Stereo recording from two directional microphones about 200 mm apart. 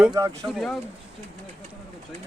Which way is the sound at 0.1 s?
20° right (ahead or behind).